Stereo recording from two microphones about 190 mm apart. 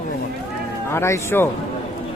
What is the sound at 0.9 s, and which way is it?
Speech, 15° left (ahead or behind).